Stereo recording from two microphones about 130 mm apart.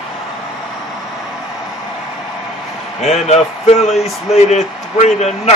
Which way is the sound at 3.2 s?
55° left (ahead or behind).